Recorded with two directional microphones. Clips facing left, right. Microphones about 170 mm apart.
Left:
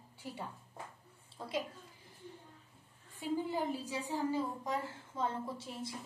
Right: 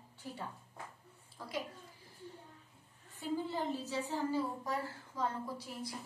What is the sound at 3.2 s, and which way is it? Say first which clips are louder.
A woman's voice: left 1 dB; 15° left (ahead or behind).